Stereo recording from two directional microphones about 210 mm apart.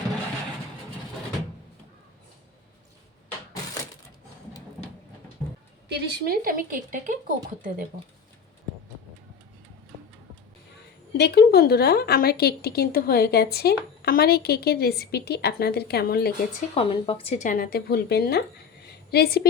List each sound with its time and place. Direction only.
5.9 s speech: 45° right (ahead or behind)
11.2 s a woman's voice: 50° left (ahead or behind)
16.7 s a woman's voice: 25° left (ahead or behind); by 19.5 s 50° left (ahead or behind)